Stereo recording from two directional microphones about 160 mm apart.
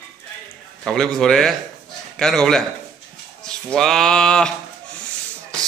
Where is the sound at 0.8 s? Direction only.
Centre (ahead or behind).